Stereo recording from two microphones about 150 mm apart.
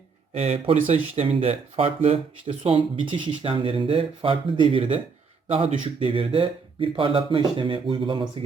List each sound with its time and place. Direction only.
0.3 s speech: 45° right (ahead or behind)